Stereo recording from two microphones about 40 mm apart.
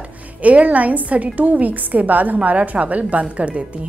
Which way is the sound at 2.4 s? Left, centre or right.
Right.